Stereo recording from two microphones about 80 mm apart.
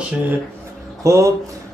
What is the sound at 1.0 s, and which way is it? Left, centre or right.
Speech, right.